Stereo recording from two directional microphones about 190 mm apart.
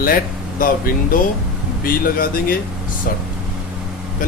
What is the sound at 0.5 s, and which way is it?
Speech, 45° left (ahead or behind).